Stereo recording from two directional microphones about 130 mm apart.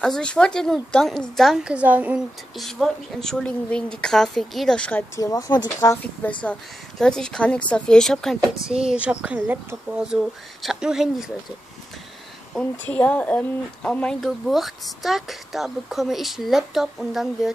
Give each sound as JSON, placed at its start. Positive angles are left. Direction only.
{"t": 0.0, "sound": "a woman's voice", "side_deg": 5}
{"t": 2.5, "sound": "speech", "side_deg": 0}
{"t": 5.1, "sound": "speech", "side_deg": 30}
{"t": 6.2, "sound": "speech", "side_deg": 15}
{"t": 12.5, "sound": "speech", "side_deg": 10}